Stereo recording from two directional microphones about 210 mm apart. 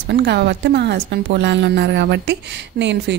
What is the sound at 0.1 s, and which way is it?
A woman's voice, 50° right (ahead or behind).